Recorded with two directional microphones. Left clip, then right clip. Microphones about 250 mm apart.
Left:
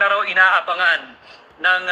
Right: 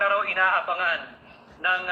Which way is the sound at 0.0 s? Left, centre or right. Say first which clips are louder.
Left 7 dB; left.